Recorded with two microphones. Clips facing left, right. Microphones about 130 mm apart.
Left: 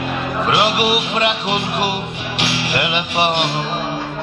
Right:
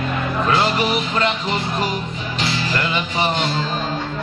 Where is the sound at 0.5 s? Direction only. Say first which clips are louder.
Left 2 dB; 15° left (ahead or behind).